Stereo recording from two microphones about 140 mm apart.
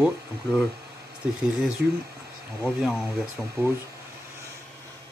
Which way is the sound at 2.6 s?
10° right (ahead or behind).